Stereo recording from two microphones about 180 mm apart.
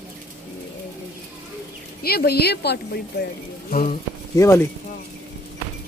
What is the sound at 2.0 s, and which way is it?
Speech, 60° left (ahead or behind).